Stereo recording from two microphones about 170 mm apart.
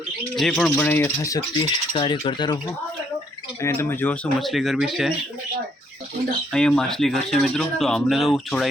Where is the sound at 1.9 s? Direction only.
30° left (ahead or behind).